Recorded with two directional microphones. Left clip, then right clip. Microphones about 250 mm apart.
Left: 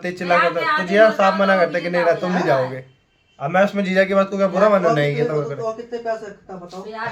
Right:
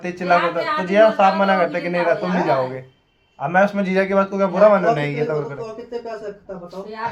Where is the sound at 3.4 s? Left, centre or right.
Centre.